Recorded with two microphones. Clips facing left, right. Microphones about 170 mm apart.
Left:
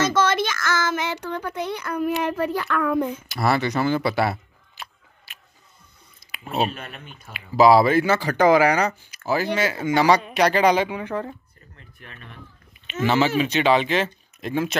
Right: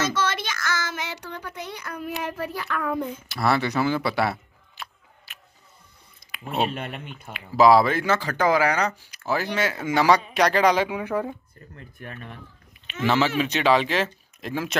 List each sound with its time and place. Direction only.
0.1 s child singing: 50° left (ahead or behind); by 3.1 s 70° left (ahead or behind)
3.3 s camera: centre (ahead or behind)
6.3 s speech: 5° left (ahead or behind)
8.9 s speech: centre (ahead or behind)
10.9 s speech: 10° right (ahead or behind)
11.7 s speech: 45° right (ahead or behind)
13.0 s speech: centre (ahead or behind)